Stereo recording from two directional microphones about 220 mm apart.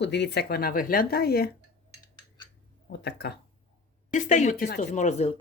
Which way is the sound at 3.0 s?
50° left (ahead or behind).